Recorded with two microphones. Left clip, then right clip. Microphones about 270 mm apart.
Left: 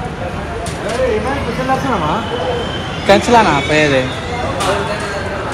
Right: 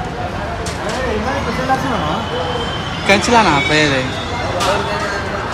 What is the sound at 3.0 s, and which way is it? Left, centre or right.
Speech, centre.